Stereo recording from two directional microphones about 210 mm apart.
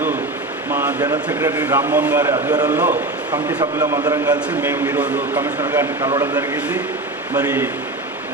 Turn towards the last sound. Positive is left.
turn(degrees=-10)  # may be behind; listen again after turning